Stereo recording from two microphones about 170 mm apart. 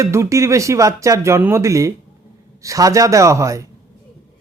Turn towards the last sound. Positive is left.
turn(degrees=-20)  # may be behind; listen again after turning